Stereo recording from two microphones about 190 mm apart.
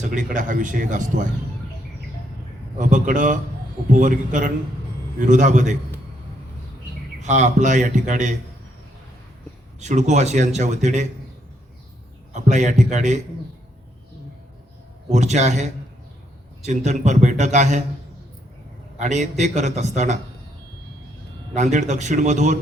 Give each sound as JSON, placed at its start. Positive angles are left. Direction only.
{"t": 0.0, "sound": "speech", "side_deg": -45}
{"t": 2.7, "sound": "speech", "side_deg": -40}
{"t": 7.2, "sound": "speech", "side_deg": -40}
{"t": 9.8, "sound": "speech", "side_deg": -40}
{"t": 12.3, "sound": "speech", "side_deg": -40}
{"t": 15.1, "sound": "speech", "side_deg": -35}
{"t": 16.6, "sound": "speech", "side_deg": -40}
{"t": 18.9, "sound": "speech", "side_deg": -40}
{"t": 21.5, "sound": "speech", "side_deg": -40}